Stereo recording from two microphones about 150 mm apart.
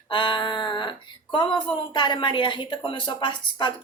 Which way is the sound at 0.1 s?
35° left (ahead or behind).